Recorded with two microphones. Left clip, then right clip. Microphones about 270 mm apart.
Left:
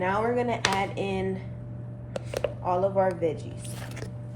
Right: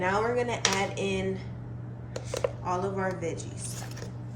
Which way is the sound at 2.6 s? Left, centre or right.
Centre.